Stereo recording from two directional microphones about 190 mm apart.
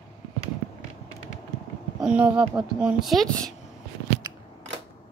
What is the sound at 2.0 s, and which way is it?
Speech, 5° right (ahead or behind).